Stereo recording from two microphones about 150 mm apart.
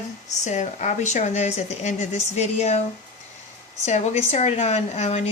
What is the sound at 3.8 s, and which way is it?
Speech, 50° left (ahead or behind).